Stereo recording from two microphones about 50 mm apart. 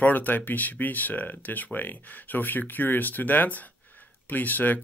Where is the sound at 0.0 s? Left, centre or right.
Left.